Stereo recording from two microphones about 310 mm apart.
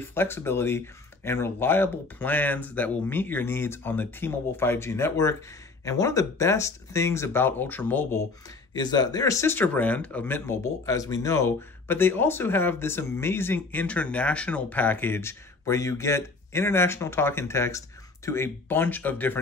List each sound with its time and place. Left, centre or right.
0.1 s speech: centre